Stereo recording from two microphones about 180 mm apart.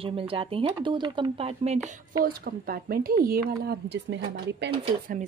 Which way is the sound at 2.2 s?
55° right (ahead or behind).